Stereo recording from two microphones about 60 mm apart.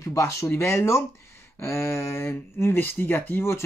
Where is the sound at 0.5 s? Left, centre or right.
Left.